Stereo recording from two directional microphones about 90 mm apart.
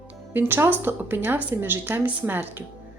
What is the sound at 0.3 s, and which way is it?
A woman's voice, 20° right (ahead or behind).